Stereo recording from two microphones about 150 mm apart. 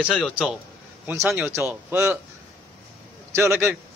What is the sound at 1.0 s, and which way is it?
A man's voice, 15° right (ahead or behind).